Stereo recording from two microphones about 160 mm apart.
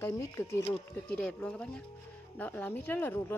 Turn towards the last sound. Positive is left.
turn(degrees=10)  # may be behind; listen again after turning